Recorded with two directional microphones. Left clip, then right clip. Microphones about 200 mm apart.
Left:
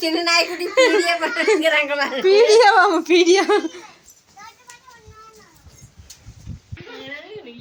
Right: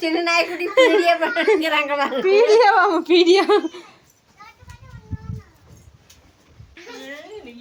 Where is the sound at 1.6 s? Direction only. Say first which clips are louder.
Left 2 dB; 60° right (ahead or behind).